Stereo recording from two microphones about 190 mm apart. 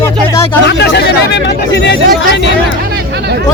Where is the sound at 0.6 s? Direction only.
65° left (ahead or behind).